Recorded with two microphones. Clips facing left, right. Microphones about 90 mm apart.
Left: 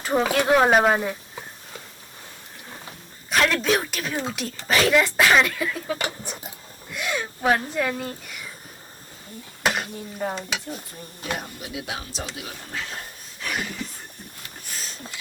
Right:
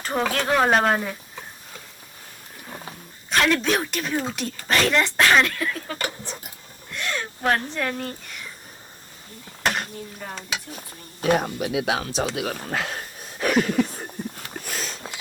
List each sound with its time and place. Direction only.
0.0 s speech: 5° left (ahead or behind)
3.2 s speech: centre (ahead or behind)
6.0 s speech: 15° left (ahead or behind)
6.9 s speech: 5° left (ahead or behind)
9.6 s a sound: 5° left (ahead or behind)
10.2 s speech: 25° left (ahead or behind)
11.2 s a sound: 70° right (ahead or behind)